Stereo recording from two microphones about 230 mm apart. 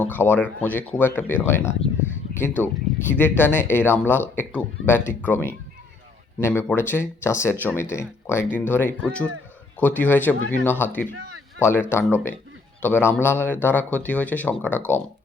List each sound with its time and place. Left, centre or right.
0.0 s speech: centre
2.0 s a sound: centre
3.1 s speech: centre